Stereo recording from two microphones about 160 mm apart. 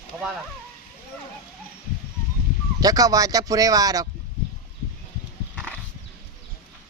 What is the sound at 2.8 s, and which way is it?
Speech, 20° right (ahead or behind).